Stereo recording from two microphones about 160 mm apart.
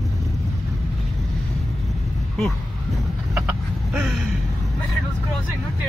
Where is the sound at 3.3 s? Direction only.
5° right (ahead or behind).